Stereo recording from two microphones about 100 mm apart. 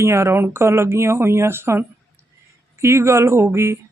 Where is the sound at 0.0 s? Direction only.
25° right (ahead or behind).